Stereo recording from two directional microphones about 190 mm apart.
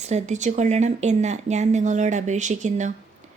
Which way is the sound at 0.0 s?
35° right (ahead or behind).